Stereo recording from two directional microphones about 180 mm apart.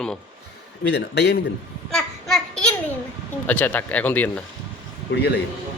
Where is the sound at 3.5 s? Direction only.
10° left (ahead or behind).